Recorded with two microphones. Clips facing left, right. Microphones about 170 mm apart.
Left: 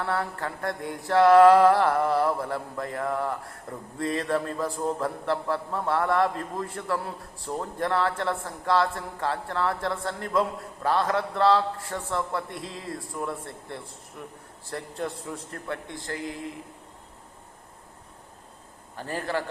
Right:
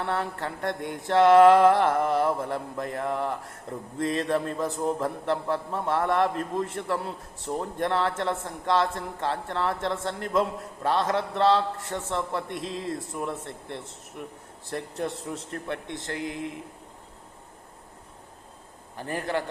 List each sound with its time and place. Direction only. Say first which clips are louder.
0.0 s mantra: even; 20° right (ahead or behind)
18.9 s a man's voice: right 1 dB; 15° right (ahead or behind)